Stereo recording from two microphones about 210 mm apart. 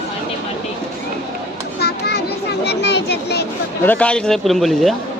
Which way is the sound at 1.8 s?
50° left (ahead or behind).